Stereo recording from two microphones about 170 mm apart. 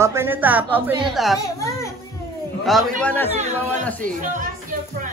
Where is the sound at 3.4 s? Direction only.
40° right (ahead or behind).